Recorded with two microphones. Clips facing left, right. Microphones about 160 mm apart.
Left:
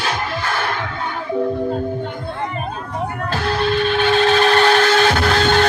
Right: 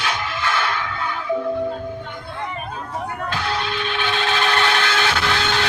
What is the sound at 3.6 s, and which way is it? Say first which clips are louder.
Music: left 8 dB; 40° left (ahead or behind).